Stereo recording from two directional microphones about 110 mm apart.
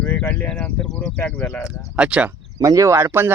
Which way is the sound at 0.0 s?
15° left (ahead or behind).